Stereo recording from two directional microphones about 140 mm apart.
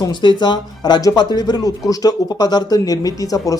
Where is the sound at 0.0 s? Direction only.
35° left (ahead or behind).